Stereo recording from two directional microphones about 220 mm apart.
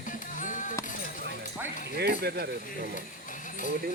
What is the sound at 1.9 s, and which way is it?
Speech, 45° right (ahead or behind).